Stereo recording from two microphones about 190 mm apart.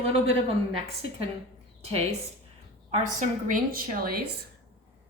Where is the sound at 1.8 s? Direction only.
35° right (ahead or behind).